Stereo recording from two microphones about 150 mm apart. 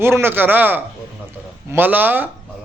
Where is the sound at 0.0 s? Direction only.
15° right (ahead or behind).